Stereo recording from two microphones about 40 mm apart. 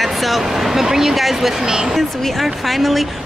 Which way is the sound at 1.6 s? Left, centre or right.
Centre.